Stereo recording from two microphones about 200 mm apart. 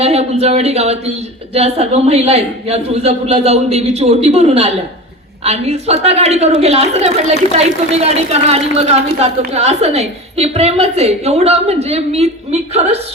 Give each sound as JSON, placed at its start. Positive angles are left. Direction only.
{"t": 0.0, "sound": "a woman's voice", "side_deg": -30}